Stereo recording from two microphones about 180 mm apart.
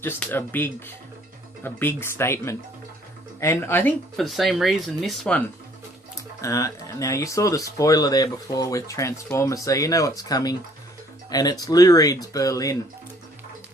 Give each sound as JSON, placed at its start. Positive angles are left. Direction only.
{"t": 0.0, "sound": "speech", "side_deg": 10}
{"t": 4.2, "sound": "speech", "side_deg": 0}
{"t": 6.4, "sound": "speech", "side_deg": 20}